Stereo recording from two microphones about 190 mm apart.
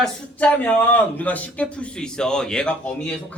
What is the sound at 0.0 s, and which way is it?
A man's voice, 5° left (ahead or behind).